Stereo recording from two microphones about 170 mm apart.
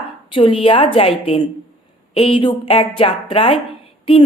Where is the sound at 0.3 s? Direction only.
30° left (ahead or behind).